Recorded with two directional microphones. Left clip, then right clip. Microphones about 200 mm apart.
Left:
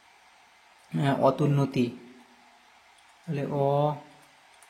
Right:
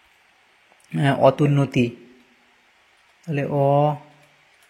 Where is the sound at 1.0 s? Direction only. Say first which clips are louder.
Right 7 dB; 20° right (ahead or behind).